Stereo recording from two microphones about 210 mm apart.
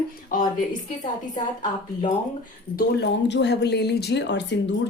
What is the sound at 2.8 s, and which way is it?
A woman's voice, 55° left (ahead or behind).